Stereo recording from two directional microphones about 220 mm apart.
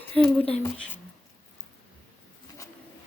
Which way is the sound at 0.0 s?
5° left (ahead or behind).